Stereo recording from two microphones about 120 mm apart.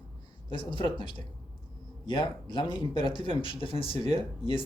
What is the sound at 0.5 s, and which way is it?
Speech, 40° left (ahead or behind).